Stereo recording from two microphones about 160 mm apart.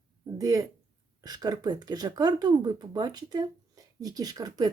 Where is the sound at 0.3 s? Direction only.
20° right (ahead or behind).